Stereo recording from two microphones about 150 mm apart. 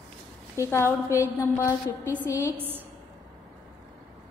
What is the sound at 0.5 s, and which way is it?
A woman's voice, 20° left (ahead or behind).